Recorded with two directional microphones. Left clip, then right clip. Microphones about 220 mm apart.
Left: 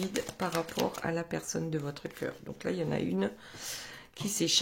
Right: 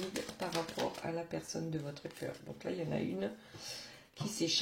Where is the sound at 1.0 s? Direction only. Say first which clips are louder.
Left 6 dB; 35° left (ahead or behind).